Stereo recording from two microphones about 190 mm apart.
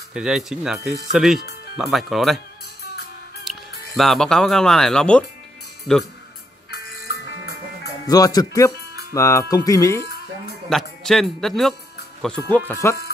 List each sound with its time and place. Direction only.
0.1 s speech: 5° right (ahead or behind)
3.4 s speech: centre (ahead or behind)
6.7 s music: 55° left (ahead or behind)
8.1 s speech: 20° left (ahead or behind)
10.7 s speech: centre (ahead or behind)